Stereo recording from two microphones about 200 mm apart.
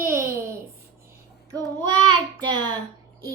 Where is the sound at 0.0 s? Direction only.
15° right (ahead or behind).